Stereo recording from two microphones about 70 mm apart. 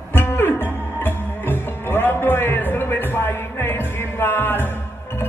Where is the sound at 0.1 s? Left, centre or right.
Left.